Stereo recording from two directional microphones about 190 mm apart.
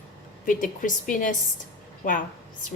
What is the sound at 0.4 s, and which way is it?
Speech, 45° left (ahead or behind).